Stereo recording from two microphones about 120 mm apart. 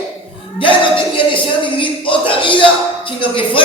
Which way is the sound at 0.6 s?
45° left (ahead or behind).